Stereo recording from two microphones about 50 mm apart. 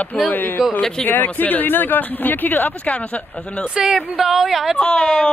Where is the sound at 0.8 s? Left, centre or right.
Centre.